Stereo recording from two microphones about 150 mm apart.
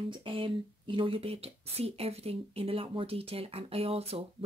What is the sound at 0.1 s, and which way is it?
Speech, 35° right (ahead or behind).